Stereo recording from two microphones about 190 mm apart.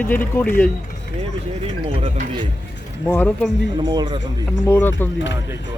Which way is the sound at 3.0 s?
10° left (ahead or behind).